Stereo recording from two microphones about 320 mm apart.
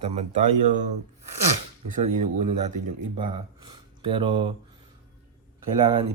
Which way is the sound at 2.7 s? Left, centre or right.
Centre.